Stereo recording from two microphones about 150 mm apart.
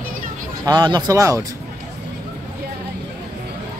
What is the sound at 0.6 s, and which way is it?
Speech, 30° right (ahead or behind).